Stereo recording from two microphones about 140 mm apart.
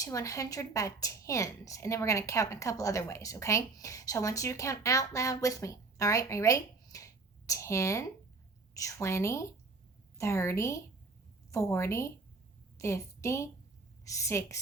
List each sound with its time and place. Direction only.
0.0 s a woman's voice: 25° left (ahead or behind)